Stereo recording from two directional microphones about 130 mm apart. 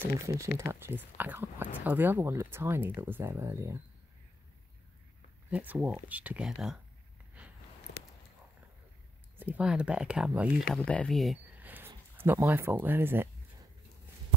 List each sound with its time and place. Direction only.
0.0 s speech: 20° right (ahead or behind)
5.5 s speech: 10° right (ahead or behind)
9.4 s speech: 10° right (ahead or behind)
10.7 s speech: 5° left (ahead or behind)
11.6 s speech: 15° right (ahead or behind)